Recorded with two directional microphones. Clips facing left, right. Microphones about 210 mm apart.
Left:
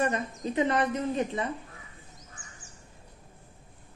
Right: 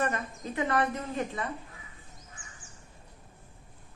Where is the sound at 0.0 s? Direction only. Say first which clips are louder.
Left 3 dB; 20° left (ahead or behind).